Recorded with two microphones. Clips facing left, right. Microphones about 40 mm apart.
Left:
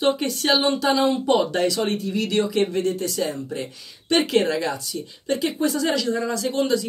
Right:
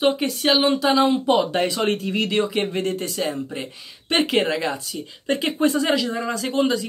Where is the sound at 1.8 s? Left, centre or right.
Right.